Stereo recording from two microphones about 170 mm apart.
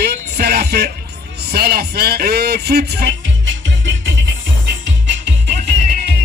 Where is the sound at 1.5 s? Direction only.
70° right (ahead or behind); by 4.1 s 90° right.